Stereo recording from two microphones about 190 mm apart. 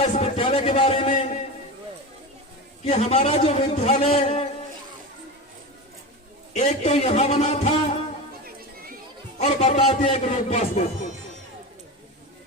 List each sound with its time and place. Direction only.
0.0 s a sound: 30° left (ahead or behind)
2.8 s a man's voice: 35° left (ahead or behind)
6.5 s a man's voice: 35° left (ahead or behind)
9.4 s a man's voice: 35° left (ahead or behind)